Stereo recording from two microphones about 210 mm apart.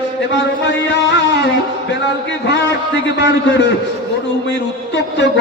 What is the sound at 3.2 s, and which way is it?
Speech, 60° left (ahead or behind).